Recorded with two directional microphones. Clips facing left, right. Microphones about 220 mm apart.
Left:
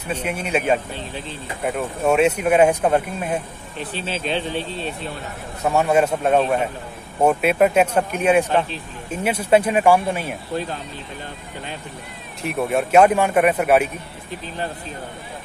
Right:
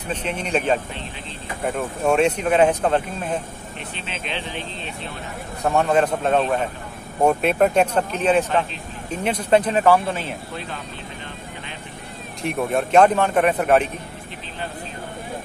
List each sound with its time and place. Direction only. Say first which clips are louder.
0.1 s speech: left 1 dB; 10° left (ahead or behind)
3.9 s speech: left 7 dB; 35° left (ahead or behind)
5.6 s speech: left 1 dB; 5° left (ahead or behind)
12.4 s speech: left 1 dB; 5° left (ahead or behind)